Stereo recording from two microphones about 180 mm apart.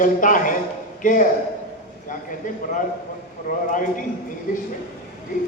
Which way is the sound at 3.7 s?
50° left (ahead or behind).